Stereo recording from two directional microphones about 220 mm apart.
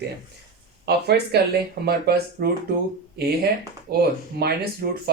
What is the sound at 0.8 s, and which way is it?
Speech, 50° right (ahead or behind).